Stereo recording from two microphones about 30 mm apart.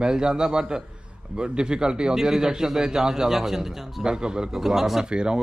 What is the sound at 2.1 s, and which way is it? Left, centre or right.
A man's voice, centre.